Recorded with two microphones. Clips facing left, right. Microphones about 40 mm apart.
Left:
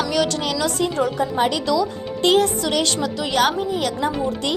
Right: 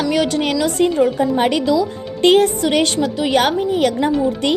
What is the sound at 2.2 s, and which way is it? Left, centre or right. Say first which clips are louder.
A woman's voice: right 5 dB; right.